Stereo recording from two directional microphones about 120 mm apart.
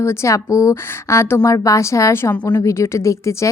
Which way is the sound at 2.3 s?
35° left (ahead or behind).